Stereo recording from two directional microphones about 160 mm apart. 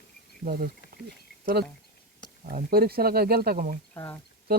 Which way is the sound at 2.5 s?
65° right (ahead or behind).